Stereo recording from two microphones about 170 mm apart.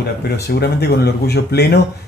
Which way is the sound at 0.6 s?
75° left (ahead or behind).